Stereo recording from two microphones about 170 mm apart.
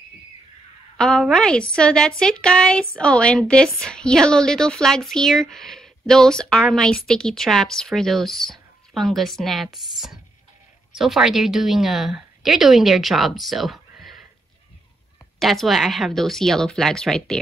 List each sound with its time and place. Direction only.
0.9 s a woman's voice: 5° left (ahead or behind)
15.3 s a woman's voice: centre (ahead or behind)